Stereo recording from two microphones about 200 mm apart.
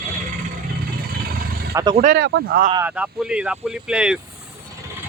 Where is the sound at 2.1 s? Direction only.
50° right (ahead or behind).